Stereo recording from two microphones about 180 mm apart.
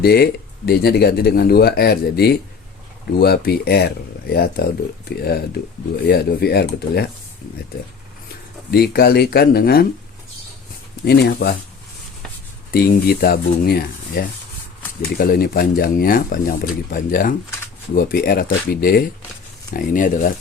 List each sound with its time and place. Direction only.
0.0 s speech: 60° left (ahead or behind)
8.7 s speech: 60° left (ahead or behind)
11.0 s speech: 65° left (ahead or behind)
12.7 s speech: 55° left (ahead or behind)